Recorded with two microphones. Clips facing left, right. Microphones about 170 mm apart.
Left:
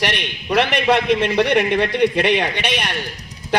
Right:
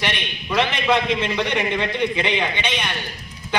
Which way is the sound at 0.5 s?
65° left (ahead or behind).